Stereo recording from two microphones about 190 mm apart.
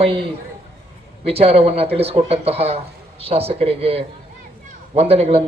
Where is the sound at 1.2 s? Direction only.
30° right (ahead or behind).